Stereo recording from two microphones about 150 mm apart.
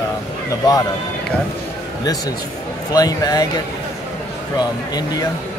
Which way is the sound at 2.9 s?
25° left (ahead or behind).